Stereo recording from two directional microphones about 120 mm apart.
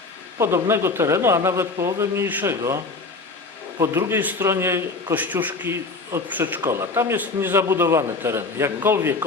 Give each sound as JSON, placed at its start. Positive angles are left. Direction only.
{"t": 0.3, "sound": "a man's voice", "side_deg": -20}
{"t": 3.8, "sound": "a man's voice", "side_deg": -20}